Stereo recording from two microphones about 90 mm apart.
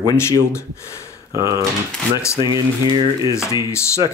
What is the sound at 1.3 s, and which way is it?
Speech, 35° right (ahead or behind).